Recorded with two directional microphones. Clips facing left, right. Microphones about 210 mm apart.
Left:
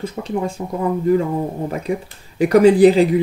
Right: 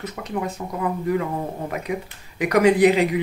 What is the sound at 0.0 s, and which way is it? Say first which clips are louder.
Speech: left 5 dB; 30° left (ahead or behind).